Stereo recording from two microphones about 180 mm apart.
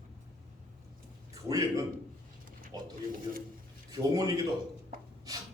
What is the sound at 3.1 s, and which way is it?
Speech, 50° right (ahead or behind).